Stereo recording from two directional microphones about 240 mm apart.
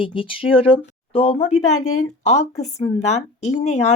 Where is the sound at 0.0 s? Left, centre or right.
Left.